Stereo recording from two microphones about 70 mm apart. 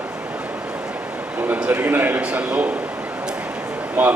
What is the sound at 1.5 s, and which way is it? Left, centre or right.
Speech, right.